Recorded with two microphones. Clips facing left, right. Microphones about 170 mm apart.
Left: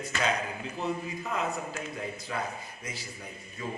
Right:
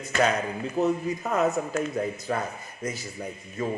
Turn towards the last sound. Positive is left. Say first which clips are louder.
# right 8 dB
turn(degrees=-45)  # may be behind; listen again after turning